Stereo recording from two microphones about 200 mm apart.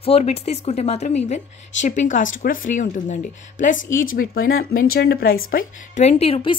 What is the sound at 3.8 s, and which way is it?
Speech, 75° left (ahead or behind).